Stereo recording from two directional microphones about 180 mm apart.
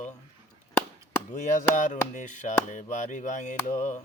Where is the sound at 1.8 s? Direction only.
45° left (ahead or behind).